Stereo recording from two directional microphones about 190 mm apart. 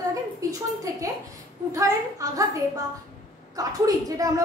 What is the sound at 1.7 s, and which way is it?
A woman's voice, 15° right (ahead or behind).